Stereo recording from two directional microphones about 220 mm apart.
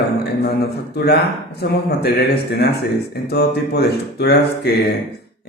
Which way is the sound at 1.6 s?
45° left (ahead or behind).